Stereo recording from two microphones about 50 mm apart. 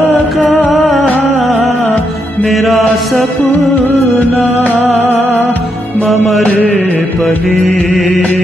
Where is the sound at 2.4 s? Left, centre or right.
Centre.